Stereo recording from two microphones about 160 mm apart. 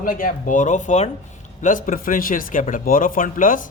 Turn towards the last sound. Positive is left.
turn(degrees=55)  # may be behind; listen again after turning